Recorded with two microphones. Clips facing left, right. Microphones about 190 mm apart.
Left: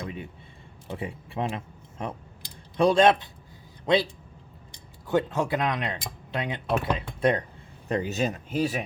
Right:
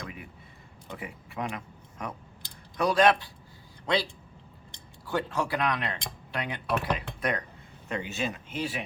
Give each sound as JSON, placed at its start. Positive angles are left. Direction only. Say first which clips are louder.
{"t": 0.0, "sound": "a sound", "louder": "left 6 dB", "side_deg": 25}
{"t": 0.9, "sound": "a man's voice", "louder": "left 6 dB", "side_deg": 30}
{"t": 5.0, "sound": "speech", "louder": "left 5 dB", "side_deg": 20}
{"t": 7.9, "sound": "speech", "louder": "left 6 dB", "side_deg": 40}